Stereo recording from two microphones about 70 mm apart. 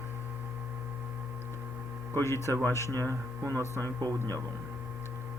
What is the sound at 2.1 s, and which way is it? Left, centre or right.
Speech, left.